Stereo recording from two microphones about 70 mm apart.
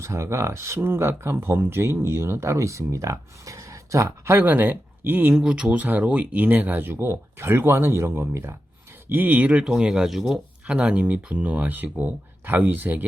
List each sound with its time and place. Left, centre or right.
0.0 s speech: right
4.4 s speech: right
5.3 s speech: centre; by 8.5 s right
9.0 s speech: right